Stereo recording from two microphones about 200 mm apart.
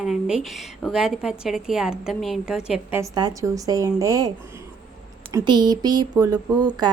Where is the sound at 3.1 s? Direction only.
20° right (ahead or behind).